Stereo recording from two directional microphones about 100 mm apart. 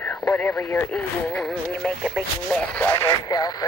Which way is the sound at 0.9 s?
10° left (ahead or behind).